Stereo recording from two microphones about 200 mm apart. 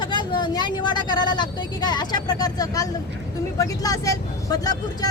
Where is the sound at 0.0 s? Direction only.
20° left (ahead or behind).